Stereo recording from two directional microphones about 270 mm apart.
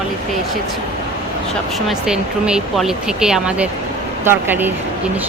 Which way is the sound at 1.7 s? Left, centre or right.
Centre.